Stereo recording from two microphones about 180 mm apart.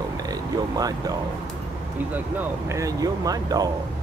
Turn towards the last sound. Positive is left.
turn(degrees=-20)  # may be behind; listen again after turning